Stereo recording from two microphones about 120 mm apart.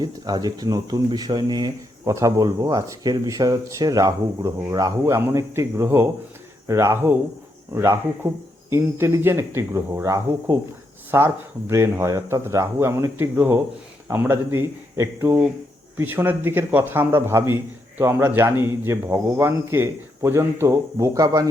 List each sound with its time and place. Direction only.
0.0 s speech: 35° right (ahead or behind)